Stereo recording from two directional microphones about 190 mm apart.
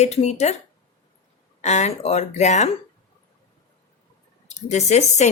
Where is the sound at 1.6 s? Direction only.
35° left (ahead or behind).